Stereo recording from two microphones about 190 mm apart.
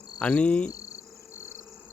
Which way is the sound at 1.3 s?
10° right (ahead or behind).